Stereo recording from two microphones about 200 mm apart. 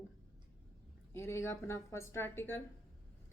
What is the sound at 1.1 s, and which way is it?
Speech, 15° left (ahead or behind).